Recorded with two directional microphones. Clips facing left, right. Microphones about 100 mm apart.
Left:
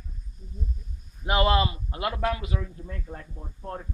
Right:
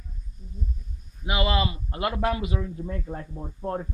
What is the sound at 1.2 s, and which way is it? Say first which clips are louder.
Speech: left 3 dB; 40° left (ahead or behind).